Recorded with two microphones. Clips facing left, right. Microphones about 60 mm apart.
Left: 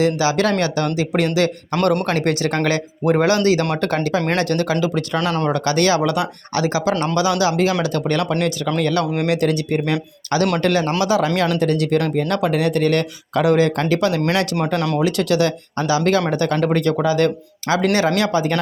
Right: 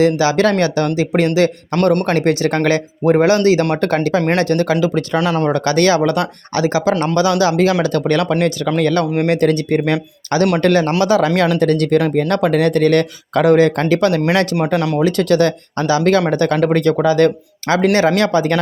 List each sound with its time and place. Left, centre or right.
0.0 s speech: right
5.1 s speech: centre
5.5 s speech: right
14.8 s speech: centre
15.0 s speech: right